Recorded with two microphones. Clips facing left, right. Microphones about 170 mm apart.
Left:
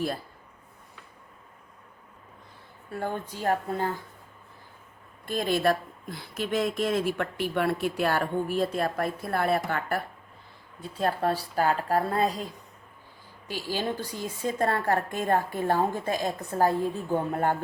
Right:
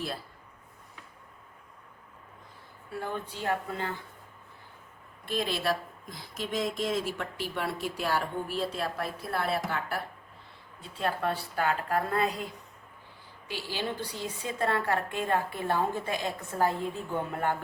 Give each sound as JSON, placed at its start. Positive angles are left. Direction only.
{"t": 3.0, "sound": "a woman's voice", "side_deg": 45}
{"t": 5.2, "sound": "speech", "side_deg": 50}
{"t": 10.9, "sound": "a woman's voice", "side_deg": 40}
{"t": 13.5, "sound": "a woman's voice", "side_deg": 45}